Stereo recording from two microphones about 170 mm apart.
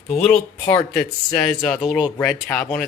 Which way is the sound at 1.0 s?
10° left (ahead or behind).